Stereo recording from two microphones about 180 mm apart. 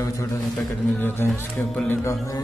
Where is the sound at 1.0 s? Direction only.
10° left (ahead or behind).